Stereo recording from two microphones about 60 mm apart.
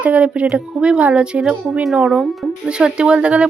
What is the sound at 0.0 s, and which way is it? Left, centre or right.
Speech, right.